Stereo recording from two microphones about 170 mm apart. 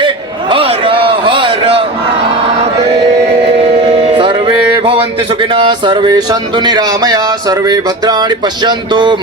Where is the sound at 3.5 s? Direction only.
35° right (ahead or behind).